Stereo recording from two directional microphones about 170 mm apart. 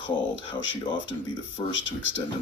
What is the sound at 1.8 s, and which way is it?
Speech, 90° left.